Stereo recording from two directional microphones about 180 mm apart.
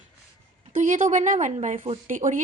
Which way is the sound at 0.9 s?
45° right (ahead or behind).